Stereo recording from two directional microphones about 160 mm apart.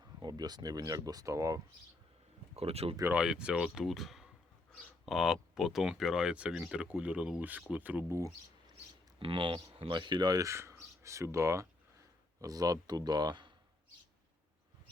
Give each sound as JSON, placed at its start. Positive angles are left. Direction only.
{"t": 0.2, "sound": "speech", "side_deg": -25}
{"t": 2.6, "sound": "speech", "side_deg": -40}
{"t": 3.1, "sound": "speech", "side_deg": -5}
{"t": 9.1, "sound": "speech", "side_deg": -35}